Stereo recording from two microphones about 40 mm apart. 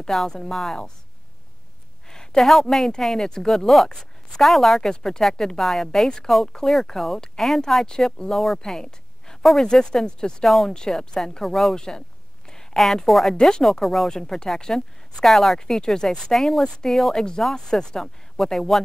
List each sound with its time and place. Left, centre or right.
0.0 s speech: centre
2.0 s a sound: centre
2.6 s speech: centre
6.0 s speech: centre
7.8 s speech: centre
8.7 s a sound: centre
9.6 s speech: centre
10.4 s speech: centre
10.7 s speech: centre
13.3 s speech: centre
15.8 s speech: centre